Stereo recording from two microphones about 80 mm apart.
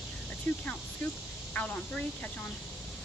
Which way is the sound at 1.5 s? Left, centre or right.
Centre.